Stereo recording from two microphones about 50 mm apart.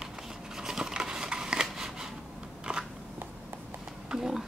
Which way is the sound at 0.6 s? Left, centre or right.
Centre.